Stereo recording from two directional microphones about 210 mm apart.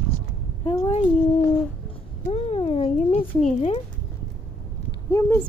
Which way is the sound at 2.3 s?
30° left (ahead or behind).